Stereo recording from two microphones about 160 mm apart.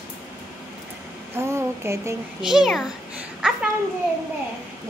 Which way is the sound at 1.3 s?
15° right (ahead or behind).